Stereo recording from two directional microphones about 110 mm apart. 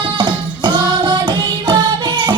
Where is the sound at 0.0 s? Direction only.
45° right (ahead or behind).